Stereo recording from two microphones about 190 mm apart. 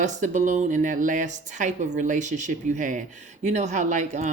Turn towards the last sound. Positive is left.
turn(degrees=-40)  # may be behind; listen again after turning